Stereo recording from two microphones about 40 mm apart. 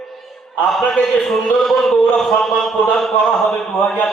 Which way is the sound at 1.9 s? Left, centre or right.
Centre.